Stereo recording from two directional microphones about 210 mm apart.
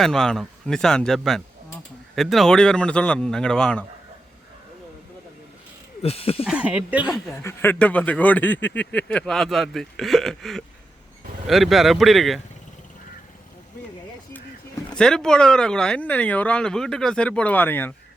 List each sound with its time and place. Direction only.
0.0 s speech: centre (ahead or behind)
6.0 s a sound: 30° left (ahead or behind)
6.4 s speech: 5° right (ahead or behind)
7.4 s speech: 10° left (ahead or behind)
14.9 s speech: 5° left (ahead or behind)